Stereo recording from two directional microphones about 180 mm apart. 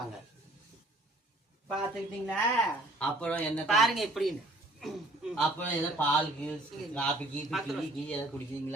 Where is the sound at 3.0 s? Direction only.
5° left (ahead or behind).